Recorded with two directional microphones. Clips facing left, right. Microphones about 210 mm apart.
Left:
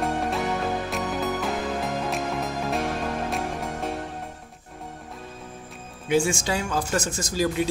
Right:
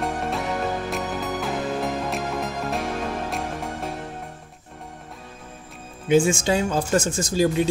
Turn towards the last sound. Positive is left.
turn(degrees=-25)  # may be behind; listen again after turning